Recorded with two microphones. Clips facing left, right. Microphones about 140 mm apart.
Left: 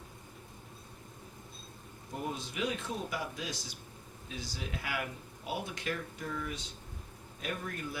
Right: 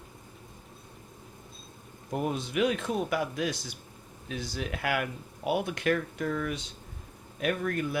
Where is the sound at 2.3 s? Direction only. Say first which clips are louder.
Right 8 dB; 65° right (ahead or behind).